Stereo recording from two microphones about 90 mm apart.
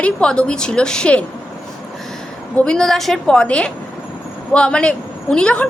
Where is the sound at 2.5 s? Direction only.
10° left (ahead or behind).